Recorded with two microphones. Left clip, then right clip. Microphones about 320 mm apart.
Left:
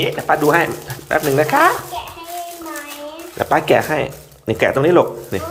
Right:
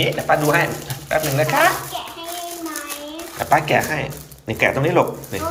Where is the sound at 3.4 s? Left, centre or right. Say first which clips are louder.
Left 2 dB; left.